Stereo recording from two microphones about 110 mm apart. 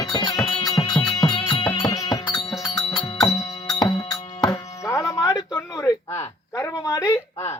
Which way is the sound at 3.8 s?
40° left (ahead or behind).